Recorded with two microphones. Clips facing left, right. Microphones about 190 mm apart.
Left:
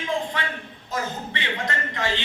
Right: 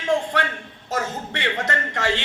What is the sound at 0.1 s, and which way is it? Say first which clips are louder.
A man's voice: right 5 dB; 75° right (ahead or behind).